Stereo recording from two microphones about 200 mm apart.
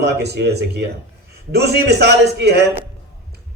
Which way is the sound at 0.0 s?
55° right (ahead or behind).